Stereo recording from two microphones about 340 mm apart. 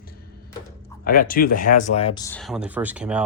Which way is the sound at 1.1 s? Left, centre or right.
Left.